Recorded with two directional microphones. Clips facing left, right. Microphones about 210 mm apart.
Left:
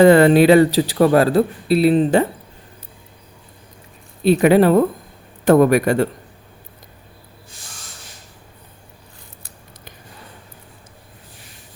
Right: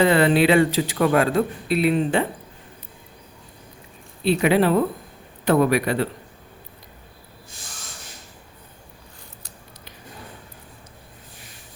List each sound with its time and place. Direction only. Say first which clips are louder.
0.0 s a man's voice: left 7 dB; 45° left (ahead or behind)
4.2 s speech: left 6 dB; 45° left (ahead or behind)